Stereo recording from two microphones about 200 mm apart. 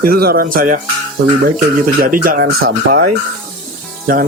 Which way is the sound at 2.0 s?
45° right (ahead or behind).